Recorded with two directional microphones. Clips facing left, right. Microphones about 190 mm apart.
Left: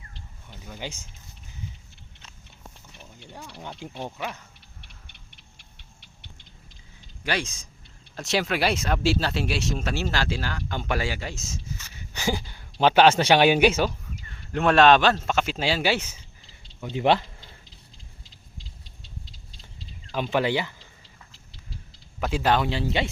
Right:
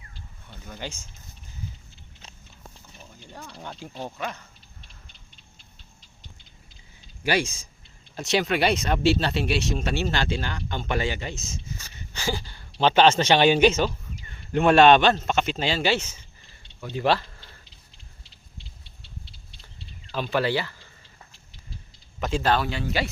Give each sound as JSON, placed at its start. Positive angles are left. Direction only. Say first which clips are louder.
{"t": 0.5, "sound": "speech", "louder": "even", "side_deg": 10}
{"t": 3.2, "sound": "speech", "louder": "even", "side_deg": 10}
{"t": 4.8, "sound": "a sound", "louder": "left 1 dB", "side_deg": 70}
{"t": 7.3, "sound": "speech", "louder": "right 4 dB", "side_deg": -5}
{"t": 11.9, "sound": "speech", "louder": "left 2 dB", "side_deg": 15}
{"t": 14.3, "sound": "speech", "louder": "right 3 dB", "side_deg": 0}
{"t": 16.8, "sound": "a sound", "louder": "left 2 dB", "side_deg": 20}
{"t": 20.3, "sound": "speech", "louder": "even", "side_deg": 15}
{"t": 22.2, "sound": "a man's voice", "louder": "left 1 dB", "side_deg": 10}